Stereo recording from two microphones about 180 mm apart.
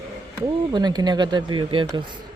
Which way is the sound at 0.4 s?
20° right (ahead or behind).